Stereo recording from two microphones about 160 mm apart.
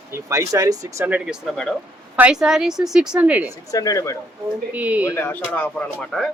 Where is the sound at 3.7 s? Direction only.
20° left (ahead or behind).